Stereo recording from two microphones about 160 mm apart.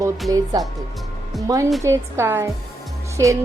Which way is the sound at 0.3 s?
20° right (ahead or behind).